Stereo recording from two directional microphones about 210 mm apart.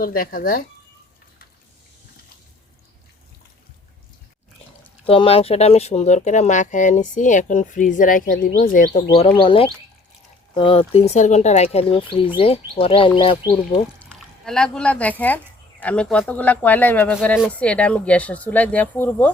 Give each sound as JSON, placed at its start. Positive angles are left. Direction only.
{"t": 0.0, "sound": "speech", "side_deg": 40}
{"t": 5.0, "sound": "speech", "side_deg": 25}
{"t": 9.4, "sound": "speech", "side_deg": 25}
{"t": 14.0, "sound": "a sound", "side_deg": 0}
{"t": 15.8, "sound": "speech", "side_deg": 5}